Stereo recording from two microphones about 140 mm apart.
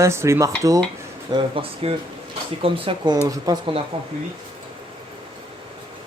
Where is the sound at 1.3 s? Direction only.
40° right (ahead or behind).